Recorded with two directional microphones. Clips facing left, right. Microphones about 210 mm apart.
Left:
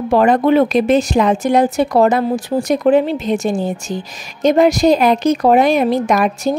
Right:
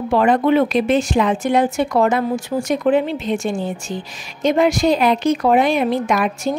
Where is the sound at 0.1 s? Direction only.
40° left (ahead or behind).